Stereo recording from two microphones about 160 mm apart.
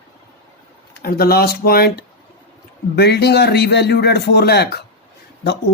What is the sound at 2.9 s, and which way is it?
A man's voice, 90° left.